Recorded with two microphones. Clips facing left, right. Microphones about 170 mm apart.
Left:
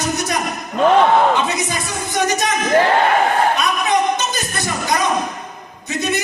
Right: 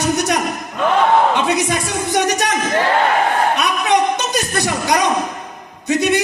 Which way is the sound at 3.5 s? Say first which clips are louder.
Right 2 dB; 70° right (ahead or behind).